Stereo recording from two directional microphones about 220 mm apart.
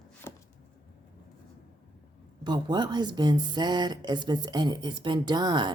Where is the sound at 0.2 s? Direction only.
10° left (ahead or behind).